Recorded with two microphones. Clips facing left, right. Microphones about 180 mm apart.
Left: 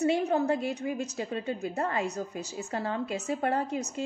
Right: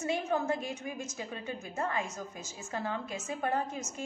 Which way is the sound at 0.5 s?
70° left (ahead or behind).